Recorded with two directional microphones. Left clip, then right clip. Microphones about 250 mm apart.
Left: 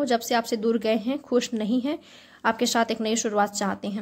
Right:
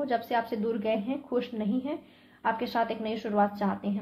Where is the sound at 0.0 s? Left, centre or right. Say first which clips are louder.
Left 5 dB; left.